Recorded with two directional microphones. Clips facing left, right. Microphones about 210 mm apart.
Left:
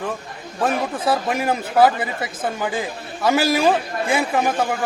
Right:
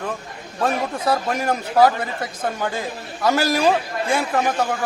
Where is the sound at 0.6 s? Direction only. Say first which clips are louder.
Left 1 dB; 5° left (ahead or behind).